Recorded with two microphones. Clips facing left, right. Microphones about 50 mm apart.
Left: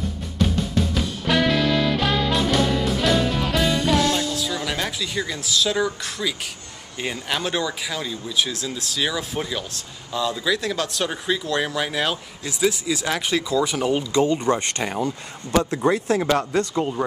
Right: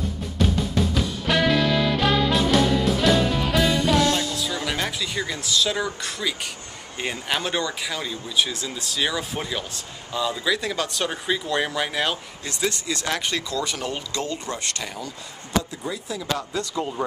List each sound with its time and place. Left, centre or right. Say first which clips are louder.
0.9 s music: left 3 dB; centre
7.0 s speech: even; centre; by 15.1 s left
15.7 s speech: left 11 dB; left